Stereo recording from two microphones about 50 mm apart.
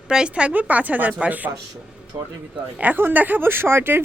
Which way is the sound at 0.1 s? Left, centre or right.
Centre.